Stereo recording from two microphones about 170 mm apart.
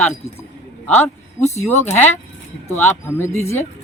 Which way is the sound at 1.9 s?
10° left (ahead or behind).